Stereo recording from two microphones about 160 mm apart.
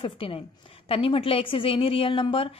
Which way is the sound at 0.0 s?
35° left (ahead or behind).